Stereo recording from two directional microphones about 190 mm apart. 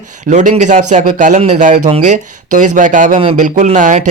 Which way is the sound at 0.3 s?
40° right (ahead or behind).